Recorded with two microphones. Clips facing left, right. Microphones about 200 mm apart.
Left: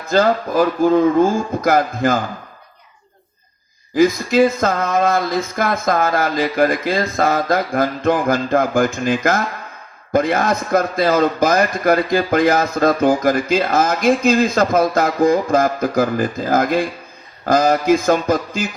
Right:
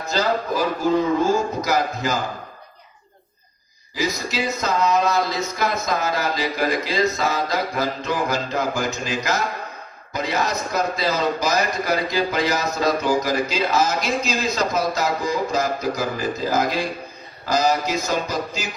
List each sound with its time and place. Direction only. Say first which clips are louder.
0.0 s a man's voice: left 6 dB; 55° left (ahead or behind)
3.9 s a man's voice: left 11 dB; 50° left (ahead or behind)